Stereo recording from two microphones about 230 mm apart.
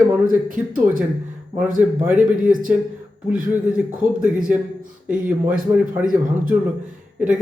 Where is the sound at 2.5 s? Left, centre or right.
Right.